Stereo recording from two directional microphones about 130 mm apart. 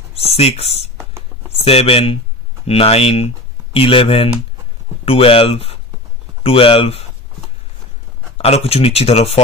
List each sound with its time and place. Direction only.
0.1 s speech: 50° left (ahead or behind)
8.4 s speech: 50° left (ahead or behind)